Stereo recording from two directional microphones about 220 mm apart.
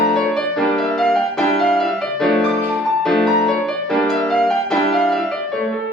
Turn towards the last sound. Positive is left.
turn(degrees=0)  # may be behind; listen again after turning